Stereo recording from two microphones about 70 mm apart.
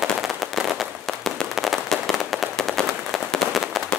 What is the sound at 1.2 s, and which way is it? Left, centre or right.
Firecracker, centre.